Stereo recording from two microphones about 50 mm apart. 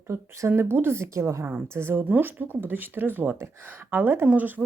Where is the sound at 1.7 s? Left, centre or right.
Right.